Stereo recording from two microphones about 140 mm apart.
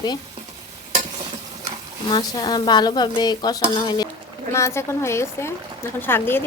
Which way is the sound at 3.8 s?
30° left (ahead or behind).